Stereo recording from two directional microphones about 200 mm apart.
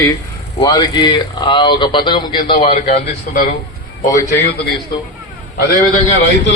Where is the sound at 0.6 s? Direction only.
20° left (ahead or behind); by 4.7 s 45° left (ahead or behind).